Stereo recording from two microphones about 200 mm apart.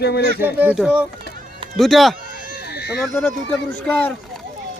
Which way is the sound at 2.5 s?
55° left (ahead or behind).